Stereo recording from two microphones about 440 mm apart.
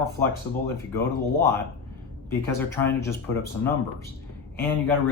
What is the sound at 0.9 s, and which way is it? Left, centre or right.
Speech, centre.